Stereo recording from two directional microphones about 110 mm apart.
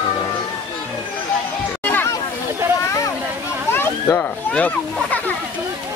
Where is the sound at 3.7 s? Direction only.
20° left (ahead or behind).